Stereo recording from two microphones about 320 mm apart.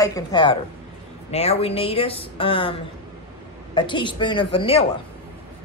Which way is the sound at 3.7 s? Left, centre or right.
Centre.